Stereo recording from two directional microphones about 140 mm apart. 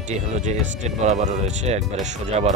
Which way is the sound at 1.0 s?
60° right (ahead or behind).